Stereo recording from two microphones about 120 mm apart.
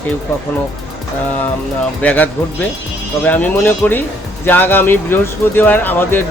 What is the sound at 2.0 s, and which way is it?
Speech, 10° left (ahead or behind).